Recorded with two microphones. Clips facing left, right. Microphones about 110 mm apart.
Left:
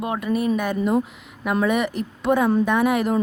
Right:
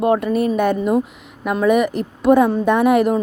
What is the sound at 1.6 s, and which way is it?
A woman's voice, 15° right (ahead or behind).